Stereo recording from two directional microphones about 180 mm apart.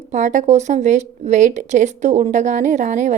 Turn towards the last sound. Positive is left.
turn(degrees=-40)  # may be behind; listen again after turning